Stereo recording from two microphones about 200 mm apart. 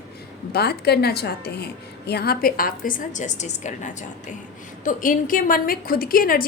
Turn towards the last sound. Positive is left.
turn(degrees=45)  # may be behind; listen again after turning